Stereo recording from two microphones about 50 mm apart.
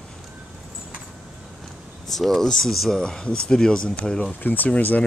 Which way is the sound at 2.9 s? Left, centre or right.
Centre.